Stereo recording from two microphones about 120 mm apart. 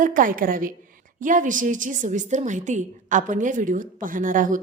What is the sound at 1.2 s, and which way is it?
A woman's voice, 90° right.